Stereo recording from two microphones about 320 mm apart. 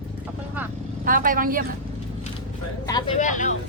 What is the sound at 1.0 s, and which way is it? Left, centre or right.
Speech, right.